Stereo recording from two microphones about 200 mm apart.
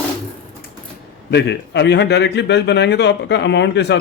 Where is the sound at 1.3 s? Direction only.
60° left (ahead or behind).